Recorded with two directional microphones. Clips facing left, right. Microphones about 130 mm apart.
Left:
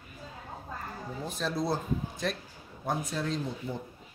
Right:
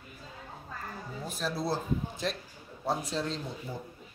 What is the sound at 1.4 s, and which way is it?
Speech, 5° right (ahead or behind).